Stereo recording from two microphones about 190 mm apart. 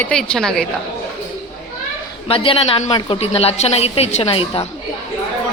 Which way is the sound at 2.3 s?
30° left (ahead or behind).